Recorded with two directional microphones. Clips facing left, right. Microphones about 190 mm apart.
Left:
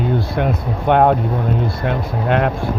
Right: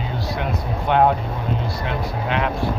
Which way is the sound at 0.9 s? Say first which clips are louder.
Left 4 dB; 55° left (ahead or behind).